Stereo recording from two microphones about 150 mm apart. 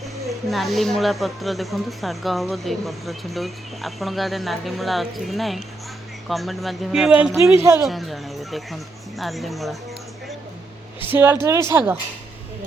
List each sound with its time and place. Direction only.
0.3 s speech: centre (ahead or behind)
7.4 s a woman's voice: 20° right (ahead or behind)
7.9 s speech: centre (ahead or behind)
11.1 s speech: 15° right (ahead or behind)